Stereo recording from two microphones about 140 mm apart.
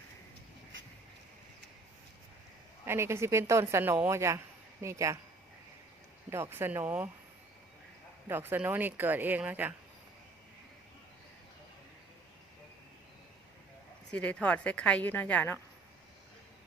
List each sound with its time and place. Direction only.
2.8 s a woman's voice: 20° right (ahead or behind)
6.3 s speech: 15° right (ahead or behind)
8.3 s speech: 15° right (ahead or behind)
14.1 s speech: 10° left (ahead or behind)